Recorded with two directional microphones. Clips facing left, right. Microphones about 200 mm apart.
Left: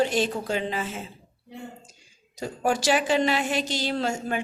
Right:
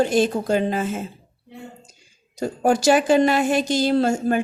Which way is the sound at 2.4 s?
45° right (ahead or behind).